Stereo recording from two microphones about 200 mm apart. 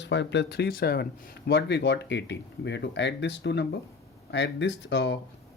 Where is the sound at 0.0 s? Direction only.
60° left (ahead or behind).